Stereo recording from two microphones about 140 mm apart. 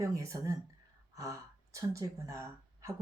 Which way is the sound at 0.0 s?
25° right (ahead or behind).